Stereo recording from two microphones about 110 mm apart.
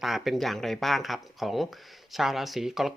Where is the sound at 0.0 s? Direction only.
Centre (ahead or behind).